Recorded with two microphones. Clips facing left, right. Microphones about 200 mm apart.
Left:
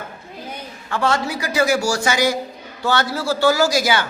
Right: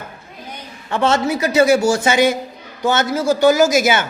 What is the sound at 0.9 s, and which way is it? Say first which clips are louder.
A man's voice: right 4 dB; 20° right (ahead or behind).